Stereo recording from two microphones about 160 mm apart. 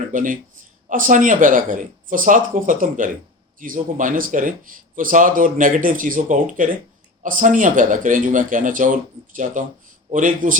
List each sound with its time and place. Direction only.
0.1 s a man's voice: 55° right (ahead or behind)